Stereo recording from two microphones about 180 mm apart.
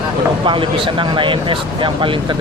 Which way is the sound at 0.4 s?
30° right (ahead or behind).